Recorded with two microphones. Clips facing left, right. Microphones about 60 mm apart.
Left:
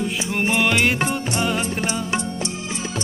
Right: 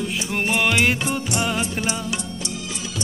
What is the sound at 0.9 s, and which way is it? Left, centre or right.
Music, left.